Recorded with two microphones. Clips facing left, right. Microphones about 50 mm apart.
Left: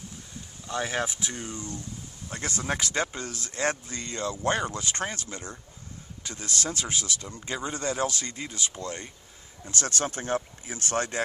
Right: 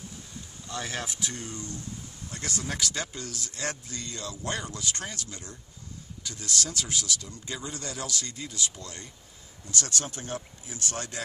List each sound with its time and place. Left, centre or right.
0.7 s speech: left